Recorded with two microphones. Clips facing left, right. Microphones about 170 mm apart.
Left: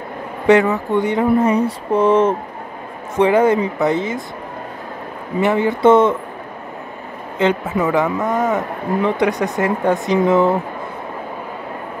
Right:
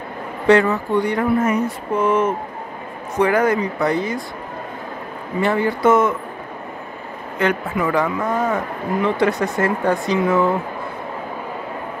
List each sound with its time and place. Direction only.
0.5 s speech: 15° left (ahead or behind)
5.4 s speech: 20° left (ahead or behind)
7.4 s speech: 25° left (ahead or behind)